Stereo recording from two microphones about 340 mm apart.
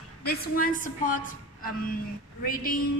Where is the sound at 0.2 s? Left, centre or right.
Left.